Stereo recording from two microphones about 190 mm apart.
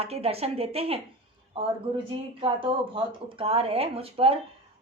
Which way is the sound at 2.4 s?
30° right (ahead or behind).